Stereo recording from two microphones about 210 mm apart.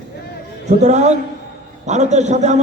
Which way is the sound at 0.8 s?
35° right (ahead or behind).